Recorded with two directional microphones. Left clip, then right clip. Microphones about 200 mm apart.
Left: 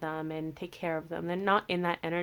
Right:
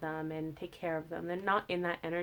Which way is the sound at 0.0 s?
40° left (ahead or behind).